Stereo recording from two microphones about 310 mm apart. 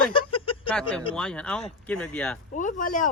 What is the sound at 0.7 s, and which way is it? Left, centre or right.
Speech, centre.